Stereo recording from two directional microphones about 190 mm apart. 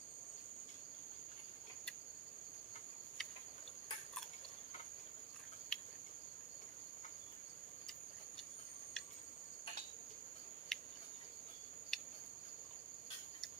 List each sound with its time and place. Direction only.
5.7 s cricket: 5° left (ahead or behind)
10.7 s cricket: centre (ahead or behind)
11.9 s cricket: centre (ahead or behind)